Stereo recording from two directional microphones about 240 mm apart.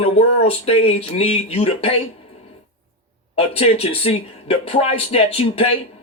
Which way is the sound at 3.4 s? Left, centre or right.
Left.